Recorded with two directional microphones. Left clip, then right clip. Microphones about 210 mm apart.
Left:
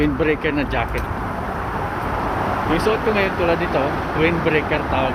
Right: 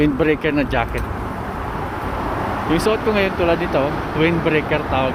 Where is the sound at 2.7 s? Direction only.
25° right (ahead or behind).